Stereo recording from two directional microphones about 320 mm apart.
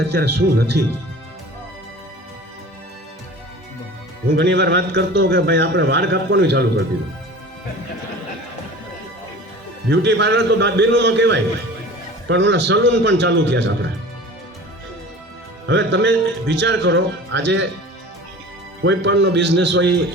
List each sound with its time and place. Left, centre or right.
0.1 s a man's voice: right
4.4 s a man's voice: right
9.9 s a man's voice: right
15.6 s a man's voice: right
18.8 s a man's voice: right